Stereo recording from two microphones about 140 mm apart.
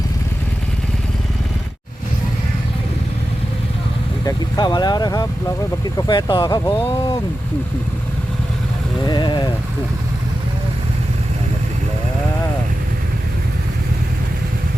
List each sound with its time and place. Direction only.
4.3 s speech: 30° left (ahead or behind)
9.0 s speech: 30° left (ahead or behind)